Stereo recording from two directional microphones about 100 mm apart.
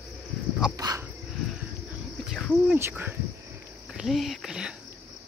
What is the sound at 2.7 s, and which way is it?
Speech, 20° right (ahead or behind).